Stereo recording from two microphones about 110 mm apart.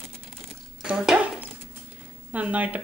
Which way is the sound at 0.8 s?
5° right (ahead or behind).